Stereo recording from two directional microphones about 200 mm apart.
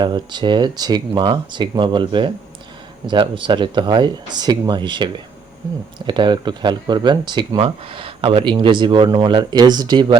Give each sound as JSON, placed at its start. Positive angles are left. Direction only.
{"t": 0.0, "sound": "speech", "side_deg": -20}